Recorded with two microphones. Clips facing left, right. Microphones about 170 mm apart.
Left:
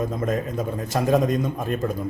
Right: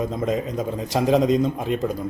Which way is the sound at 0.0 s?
20° right (ahead or behind).